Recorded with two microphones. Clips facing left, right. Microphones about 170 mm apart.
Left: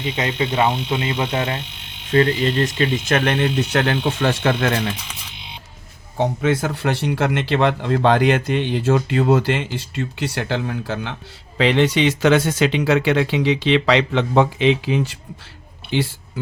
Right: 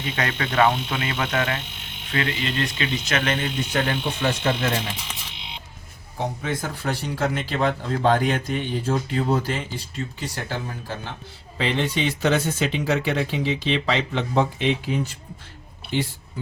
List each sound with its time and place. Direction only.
0.0 s speech: 20° left (ahead or behind)
2.1 s speech: 35° left (ahead or behind); by 4.7 s 90° left
6.1 s speech: 85° left